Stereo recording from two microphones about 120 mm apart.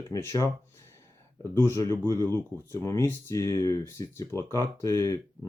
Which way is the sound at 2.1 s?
25° left (ahead or behind).